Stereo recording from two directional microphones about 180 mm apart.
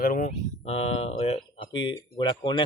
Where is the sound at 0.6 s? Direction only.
35° left (ahead or behind).